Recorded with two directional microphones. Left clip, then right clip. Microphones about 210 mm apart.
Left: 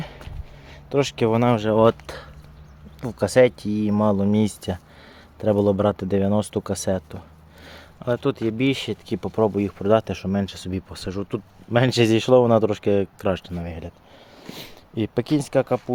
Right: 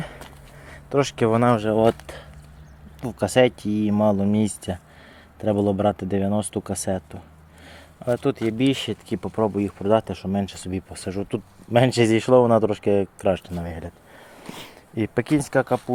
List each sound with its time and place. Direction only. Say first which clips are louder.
0.7 s speech: even; 5° left (ahead or behind); by 2.2 s 25° left (ahead or behind)
3.0 s speech: left 2 dB; 10° left (ahead or behind)
7.6 s a sound: right 1 dB; 15° left (ahead or behind)
8.4 s speech: even; 5° left (ahead or behind)
9.1 s speech: left 2 dB; 15° left (ahead or behind)
13.5 s speech: right 1 dB; centre (ahead or behind)
14.4 s speech: left 1 dB; 15° left (ahead or behind)